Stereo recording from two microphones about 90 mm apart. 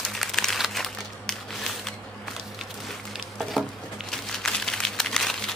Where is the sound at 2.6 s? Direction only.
5° right (ahead or behind).